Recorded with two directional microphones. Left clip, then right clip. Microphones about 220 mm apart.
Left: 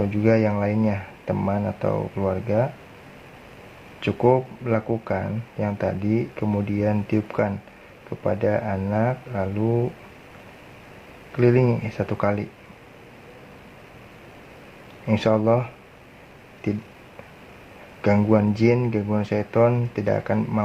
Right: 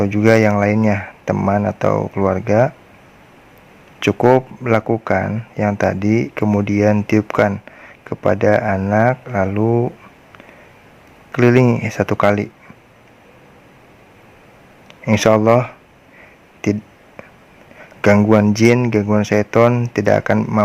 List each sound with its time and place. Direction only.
0.0 s speech: 45° right (ahead or behind)
4.0 s speech: 40° right (ahead or behind)
11.3 s speech: 45° right (ahead or behind)
15.0 s speech: 45° right (ahead or behind)
18.0 s speech: 45° right (ahead or behind)